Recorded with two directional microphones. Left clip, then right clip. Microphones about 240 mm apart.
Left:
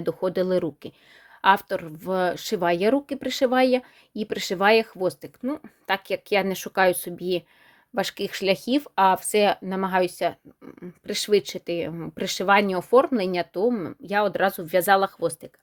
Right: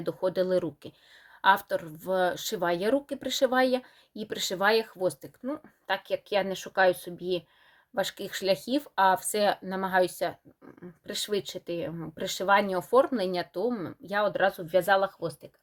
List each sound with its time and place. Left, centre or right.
0.0 s speech: left
8.7 s speech: left